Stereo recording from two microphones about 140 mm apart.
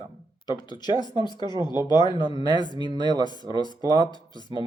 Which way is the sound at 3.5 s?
30° left (ahead or behind).